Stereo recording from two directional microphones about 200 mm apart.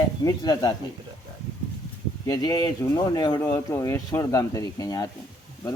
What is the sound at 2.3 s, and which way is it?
Speech, 20° left (ahead or behind).